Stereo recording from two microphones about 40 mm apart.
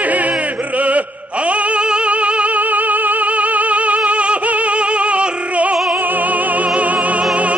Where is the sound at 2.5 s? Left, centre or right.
Right.